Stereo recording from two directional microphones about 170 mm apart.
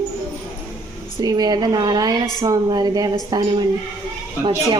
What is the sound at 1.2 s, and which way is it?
Speech, 25° right (ahead or behind).